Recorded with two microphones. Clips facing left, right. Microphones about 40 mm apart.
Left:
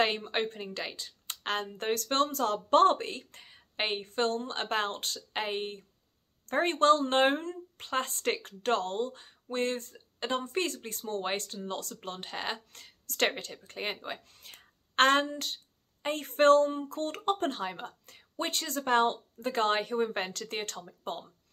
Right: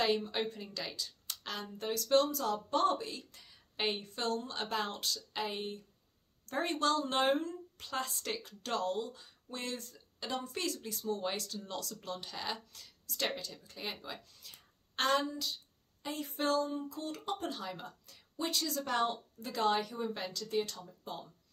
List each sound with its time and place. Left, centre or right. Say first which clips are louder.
0.0 s speech: left 3 dB; left
0.7 s speech: left 4 dB; left